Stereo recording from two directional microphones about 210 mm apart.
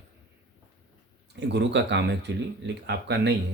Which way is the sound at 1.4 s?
55° right (ahead or behind).